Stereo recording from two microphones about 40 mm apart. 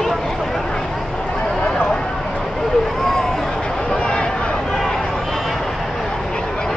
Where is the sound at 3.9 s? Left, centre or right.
Left.